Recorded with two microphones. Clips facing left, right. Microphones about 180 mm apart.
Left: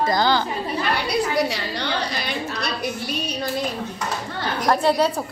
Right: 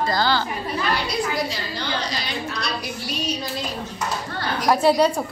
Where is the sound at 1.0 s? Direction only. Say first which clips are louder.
Left 3 dB; 70° left (ahead or behind).